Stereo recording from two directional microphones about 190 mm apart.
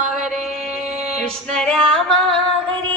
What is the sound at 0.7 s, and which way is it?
Music, 35° right (ahead or behind).